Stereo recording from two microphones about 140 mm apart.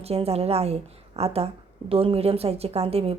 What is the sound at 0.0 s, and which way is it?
Speech, 45° right (ahead or behind).